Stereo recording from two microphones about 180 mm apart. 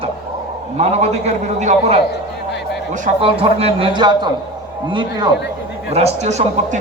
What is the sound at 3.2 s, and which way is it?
A man's voice, 30° right (ahead or behind).